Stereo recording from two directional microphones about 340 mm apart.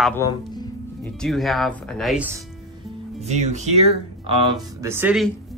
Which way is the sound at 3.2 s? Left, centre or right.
Centre.